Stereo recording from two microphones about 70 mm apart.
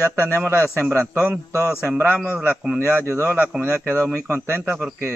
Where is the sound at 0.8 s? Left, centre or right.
Right.